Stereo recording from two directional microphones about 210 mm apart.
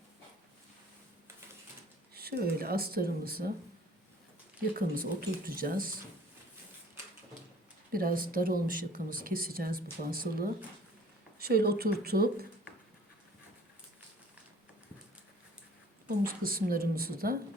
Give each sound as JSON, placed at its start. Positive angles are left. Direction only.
{"t": 2.1, "sound": "speech", "side_deg": -45}
{"t": 4.7, "sound": "speech", "side_deg": -40}
{"t": 7.9, "sound": "speech", "side_deg": -45}
{"t": 16.0, "sound": "speech", "side_deg": -45}